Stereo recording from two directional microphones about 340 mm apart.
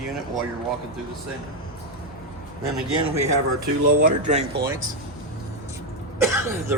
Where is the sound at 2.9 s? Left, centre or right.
Centre.